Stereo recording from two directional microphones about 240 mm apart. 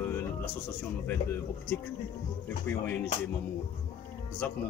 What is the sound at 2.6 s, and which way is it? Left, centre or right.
Speech, centre.